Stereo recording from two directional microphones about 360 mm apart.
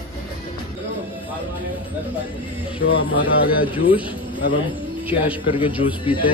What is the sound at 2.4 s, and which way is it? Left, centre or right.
A man's voice, centre.